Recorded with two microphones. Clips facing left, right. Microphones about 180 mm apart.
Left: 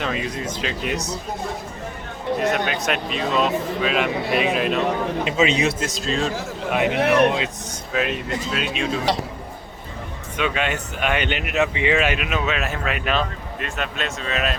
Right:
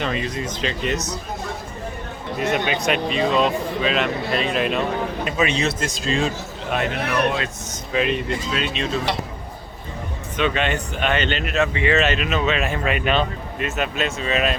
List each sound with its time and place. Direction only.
0.0 s speech: 5° left (ahead or behind)
2.4 s a man's voice: centre (ahead or behind); by 5.7 s 20° left (ahead or behind)
5.8 s speech: centre (ahead or behind)
6.7 s speech: 15° left (ahead or behind)
7.9 s speech: 5° left (ahead or behind)
10.3 s speech: 5° left (ahead or behind)